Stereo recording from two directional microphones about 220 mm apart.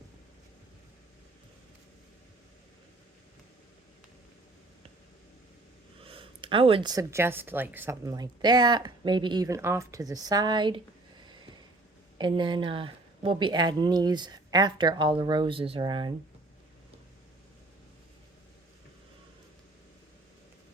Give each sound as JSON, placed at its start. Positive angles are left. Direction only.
{"t": 6.0, "sound": "speech", "side_deg": -25}
{"t": 12.1, "sound": "speech", "side_deg": -20}